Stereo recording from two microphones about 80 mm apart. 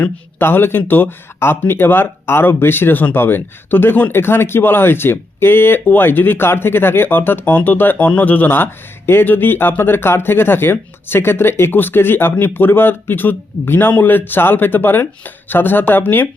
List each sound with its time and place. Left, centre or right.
0.0 s speech: left